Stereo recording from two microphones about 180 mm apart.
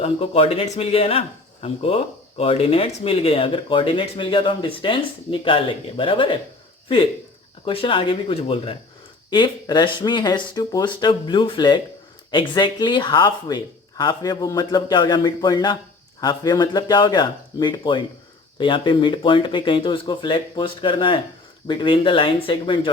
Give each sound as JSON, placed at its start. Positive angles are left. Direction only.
{"t": 0.0, "sound": "speech", "side_deg": 35}